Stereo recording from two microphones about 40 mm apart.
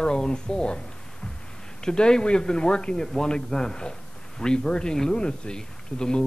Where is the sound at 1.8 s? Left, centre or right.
Centre.